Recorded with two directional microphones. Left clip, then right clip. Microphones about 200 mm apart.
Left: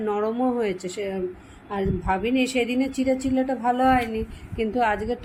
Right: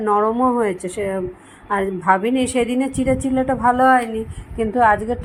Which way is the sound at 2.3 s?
50° right (ahead or behind).